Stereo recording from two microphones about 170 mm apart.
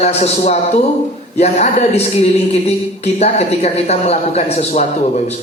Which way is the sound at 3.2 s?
40° left (ahead or behind).